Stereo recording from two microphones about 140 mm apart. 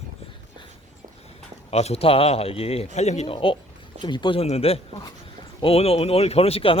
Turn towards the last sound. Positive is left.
turn(degrees=45)  # may be behind; listen again after turning